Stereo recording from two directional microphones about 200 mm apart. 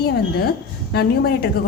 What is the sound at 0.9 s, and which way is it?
Speech, 55° left (ahead or behind).